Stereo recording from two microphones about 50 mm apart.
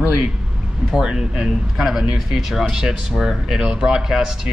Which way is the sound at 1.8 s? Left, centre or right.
Centre.